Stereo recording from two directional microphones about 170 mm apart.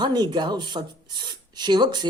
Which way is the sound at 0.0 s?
25° right (ahead or behind).